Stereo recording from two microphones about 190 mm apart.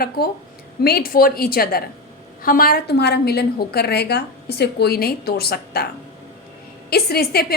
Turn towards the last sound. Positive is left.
turn(degrees=55)  # may be behind; listen again after turning